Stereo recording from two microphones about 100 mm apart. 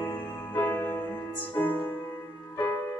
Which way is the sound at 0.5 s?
15° left (ahead or behind).